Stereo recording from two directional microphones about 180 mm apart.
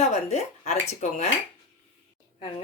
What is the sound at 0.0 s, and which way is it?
Speech, 40° left (ahead or behind).